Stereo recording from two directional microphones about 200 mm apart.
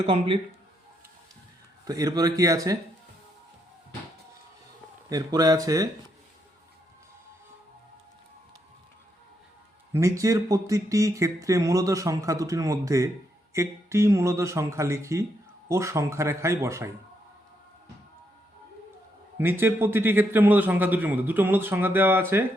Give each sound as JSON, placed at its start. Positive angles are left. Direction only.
{"t": 0.0, "sound": "speech", "side_deg": -30}
{"t": 1.8, "sound": "speech", "side_deg": -20}
{"t": 5.0, "sound": "speech", "side_deg": -20}
{"t": 9.9, "sound": "speech", "side_deg": -15}
{"t": 19.4, "sound": "speech", "side_deg": -10}